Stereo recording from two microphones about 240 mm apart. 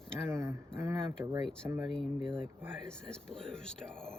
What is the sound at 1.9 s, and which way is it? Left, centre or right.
Speech, centre.